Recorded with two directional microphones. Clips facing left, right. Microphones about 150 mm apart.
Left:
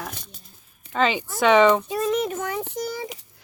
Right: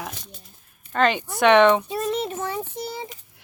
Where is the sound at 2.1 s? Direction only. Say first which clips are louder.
Left 2 dB; 30° right (ahead or behind).